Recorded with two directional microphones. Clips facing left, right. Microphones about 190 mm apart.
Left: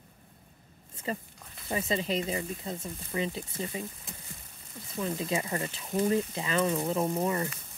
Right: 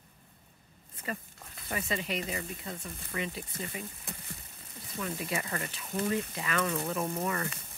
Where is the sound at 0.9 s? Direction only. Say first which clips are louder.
Left 4 dB; 25° left (ahead or behind).